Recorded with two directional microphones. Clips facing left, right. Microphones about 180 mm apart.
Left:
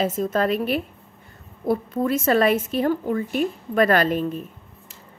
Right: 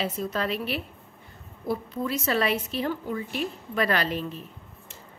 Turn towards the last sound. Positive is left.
turn(degrees=50)  # may be behind; listen again after turning